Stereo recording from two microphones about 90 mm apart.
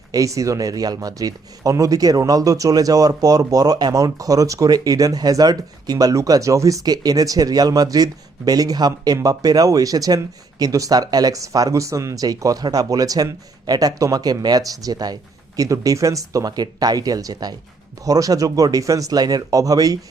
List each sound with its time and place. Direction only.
0.1 s speech: 40° right (ahead or behind)